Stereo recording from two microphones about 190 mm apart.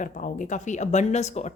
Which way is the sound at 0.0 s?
45° left (ahead or behind).